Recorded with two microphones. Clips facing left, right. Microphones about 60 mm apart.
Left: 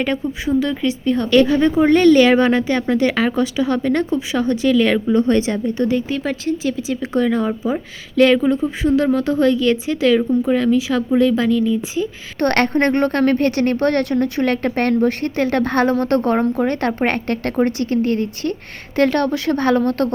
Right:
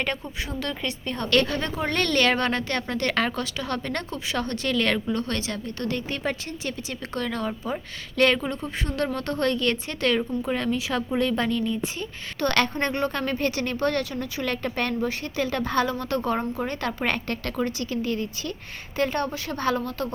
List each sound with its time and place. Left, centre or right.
0.0 s speech: centre
5.2 s a woman's voice: left
6.1 s speech: centre
12.4 s speech: left
18.9 s speech: left